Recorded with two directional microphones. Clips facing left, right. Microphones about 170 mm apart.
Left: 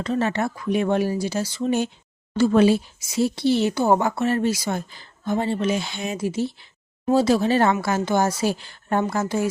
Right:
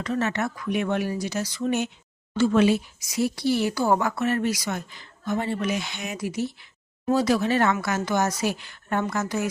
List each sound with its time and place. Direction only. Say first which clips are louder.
0.0 s speech: left 3 dB; 30° left (ahead or behind)